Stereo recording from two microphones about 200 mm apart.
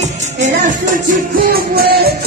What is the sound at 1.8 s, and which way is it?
Music, 50° right (ahead or behind).